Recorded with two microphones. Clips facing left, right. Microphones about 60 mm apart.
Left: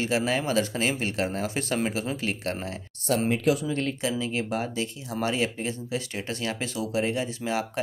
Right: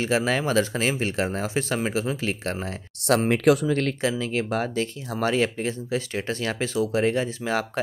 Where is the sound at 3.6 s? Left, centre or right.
Right.